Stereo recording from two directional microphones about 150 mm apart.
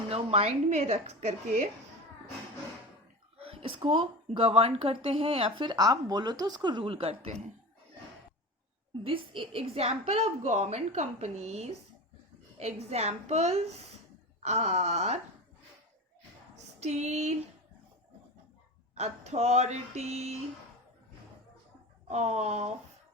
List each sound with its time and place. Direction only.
0.1 s a woman's voice: 45° right (ahead or behind)
3.3 s speech: 40° right (ahead or behind)
9.0 s a woman's voice: 35° right (ahead or behind)
16.8 s a woman's voice: 50° right (ahead or behind)
18.9 s a woman's voice: 45° right (ahead or behind)
22.0 s a woman's voice: 50° right (ahead or behind)